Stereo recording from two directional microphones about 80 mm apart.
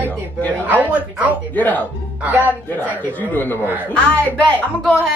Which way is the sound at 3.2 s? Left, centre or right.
Left.